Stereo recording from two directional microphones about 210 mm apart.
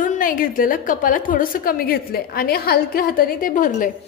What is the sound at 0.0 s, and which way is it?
A woman's voice, 40° left (ahead or behind).